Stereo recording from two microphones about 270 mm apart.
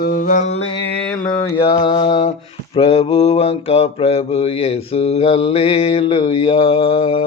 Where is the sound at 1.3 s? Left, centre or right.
Centre.